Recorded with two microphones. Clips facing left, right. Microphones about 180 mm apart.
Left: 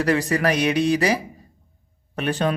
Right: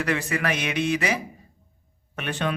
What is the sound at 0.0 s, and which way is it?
Speech, 35° left (ahead or behind).